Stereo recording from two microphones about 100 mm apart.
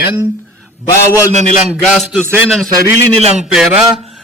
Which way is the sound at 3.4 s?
5° right (ahead or behind).